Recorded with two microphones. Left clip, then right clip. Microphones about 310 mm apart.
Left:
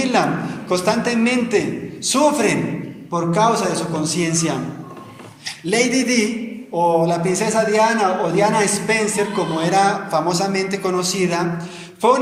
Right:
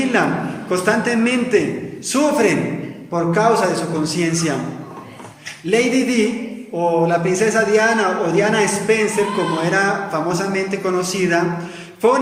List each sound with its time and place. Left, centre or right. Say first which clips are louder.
0.0 s a sound: even; centre
0.7 s a man's voice: right 1 dB; centre
5.6 s a man's voice: right 1 dB; centre